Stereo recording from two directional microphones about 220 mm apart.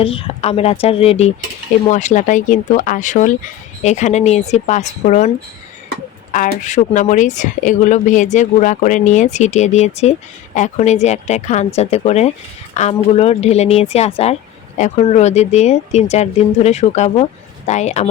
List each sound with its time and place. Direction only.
0.0 s speech: 25° left (ahead or behind)
6.3 s speech: 35° left (ahead or behind)